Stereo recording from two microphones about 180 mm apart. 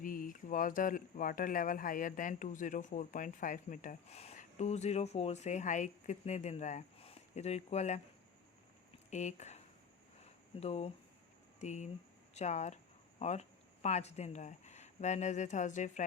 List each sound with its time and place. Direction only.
0.0 s speech: 50° left (ahead or behind)
9.0 s speech: 40° left (ahead or behind)
10.6 s speech: 35° left (ahead or behind)
12.3 s a sound: 40° left (ahead or behind)
13.8 s speech: 40° left (ahead or behind)